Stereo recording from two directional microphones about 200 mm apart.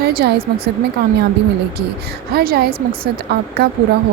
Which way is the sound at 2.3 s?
50° right (ahead or behind).